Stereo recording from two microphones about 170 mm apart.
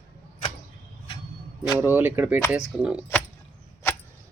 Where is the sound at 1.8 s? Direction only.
10° right (ahead or behind).